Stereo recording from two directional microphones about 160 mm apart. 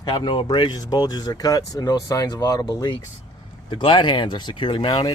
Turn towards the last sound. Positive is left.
turn(degrees=30)  # may be behind; listen again after turning